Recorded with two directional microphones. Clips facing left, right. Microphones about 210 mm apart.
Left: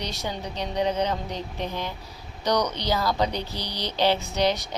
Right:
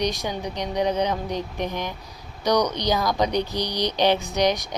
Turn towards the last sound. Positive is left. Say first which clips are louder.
# right 2 dB
turn(degrees=-15)  # may be behind; listen again after turning